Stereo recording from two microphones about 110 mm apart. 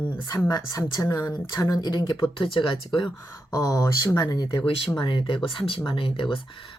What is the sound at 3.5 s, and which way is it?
Speech, 35° left (ahead or behind).